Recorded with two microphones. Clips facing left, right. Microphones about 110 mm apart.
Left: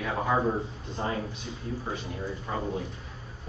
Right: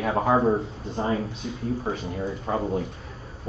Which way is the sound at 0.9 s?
25° right (ahead or behind).